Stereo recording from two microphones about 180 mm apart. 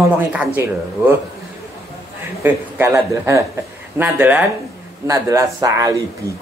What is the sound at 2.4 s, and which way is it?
Speech, 15° right (ahead or behind).